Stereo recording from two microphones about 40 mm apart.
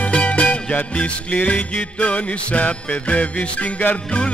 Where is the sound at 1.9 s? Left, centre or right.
Left.